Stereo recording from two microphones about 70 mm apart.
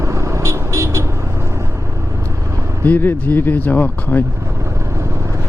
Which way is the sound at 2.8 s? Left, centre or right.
Left.